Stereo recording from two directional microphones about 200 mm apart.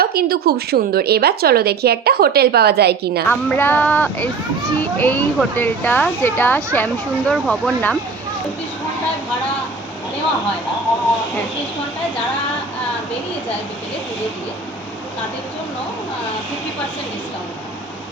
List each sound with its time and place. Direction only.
0.0 s a woman's voice: 50° right (ahead or behind)
3.2 s speech: 10° left (ahead or behind)